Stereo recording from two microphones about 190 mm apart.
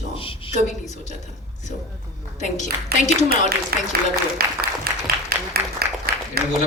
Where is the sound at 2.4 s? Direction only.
40° left (ahead or behind).